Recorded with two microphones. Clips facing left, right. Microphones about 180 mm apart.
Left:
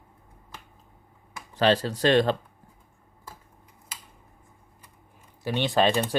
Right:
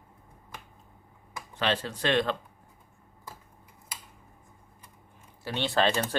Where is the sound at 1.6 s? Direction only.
35° left (ahead or behind).